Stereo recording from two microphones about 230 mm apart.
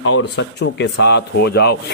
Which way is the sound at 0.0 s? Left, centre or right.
Left.